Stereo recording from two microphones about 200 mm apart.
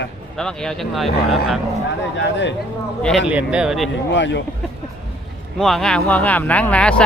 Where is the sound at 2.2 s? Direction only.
65° left (ahead or behind).